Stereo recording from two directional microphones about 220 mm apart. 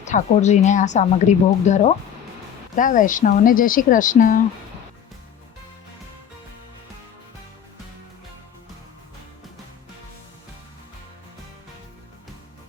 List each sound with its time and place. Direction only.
0.0 s speech: 35° left (ahead or behind)